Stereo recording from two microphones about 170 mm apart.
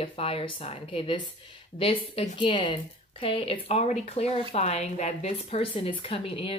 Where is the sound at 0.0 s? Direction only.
35° left (ahead or behind).